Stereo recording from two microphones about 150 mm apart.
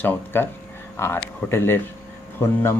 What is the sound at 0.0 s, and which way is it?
A man's voice, 10° left (ahead or behind).